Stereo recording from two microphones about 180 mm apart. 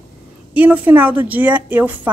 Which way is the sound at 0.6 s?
10° right (ahead or behind).